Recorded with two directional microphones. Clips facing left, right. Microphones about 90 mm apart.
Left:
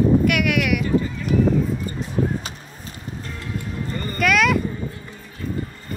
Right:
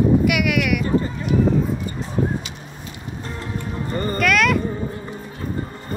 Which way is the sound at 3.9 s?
35° right (ahead or behind).